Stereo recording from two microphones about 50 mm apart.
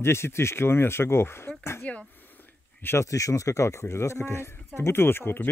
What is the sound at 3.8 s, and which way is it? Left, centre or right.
Speech, left.